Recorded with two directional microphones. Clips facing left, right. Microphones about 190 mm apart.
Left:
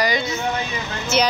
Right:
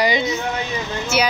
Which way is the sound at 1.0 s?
10° right (ahead or behind).